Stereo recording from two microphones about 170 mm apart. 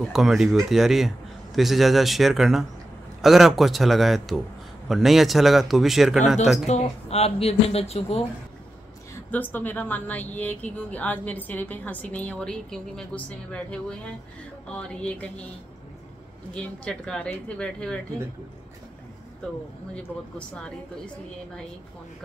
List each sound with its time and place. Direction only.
0.1 s a man's voice: centre (ahead or behind)
6.7 s speech: 40° left (ahead or behind)
9.3 s a woman's voice: 10° left (ahead or behind)
16.5 s a man's voice: 5° left (ahead or behind)
20.0 s a man's voice: 5° left (ahead or behind)